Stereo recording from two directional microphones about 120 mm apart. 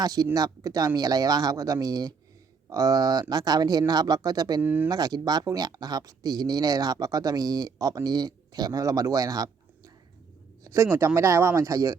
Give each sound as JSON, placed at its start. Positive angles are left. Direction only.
{"t": 0.0, "sound": "speech", "side_deg": -30}
{"t": 4.6, "sound": "speech", "side_deg": -15}
{"t": 4.9, "sound": "speech", "side_deg": -35}
{"t": 10.6, "sound": "a sound", "side_deg": -25}
{"t": 10.9, "sound": "speech", "side_deg": -25}